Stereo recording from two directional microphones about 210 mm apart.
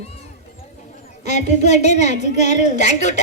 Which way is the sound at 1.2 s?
35° left (ahead or behind).